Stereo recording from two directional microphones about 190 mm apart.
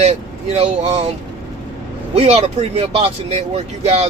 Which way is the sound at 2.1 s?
35° right (ahead or behind).